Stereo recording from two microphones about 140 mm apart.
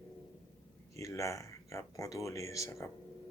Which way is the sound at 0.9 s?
20° left (ahead or behind).